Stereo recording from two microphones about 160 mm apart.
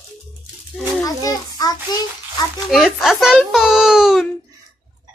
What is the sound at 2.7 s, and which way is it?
A child's voice, centre (ahead or behind).